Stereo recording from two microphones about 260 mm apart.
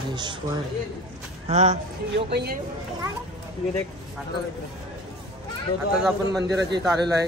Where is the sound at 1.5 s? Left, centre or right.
Right.